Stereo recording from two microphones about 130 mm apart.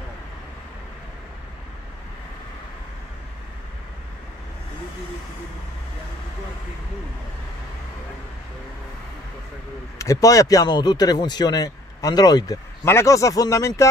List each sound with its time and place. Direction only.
9.9 s speech: 25° left (ahead or behind)
12.8 s speech: 20° left (ahead or behind)